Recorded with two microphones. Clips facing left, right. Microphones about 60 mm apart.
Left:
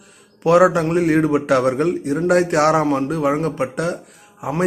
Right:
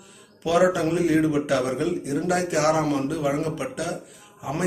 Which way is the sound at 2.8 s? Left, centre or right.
Left.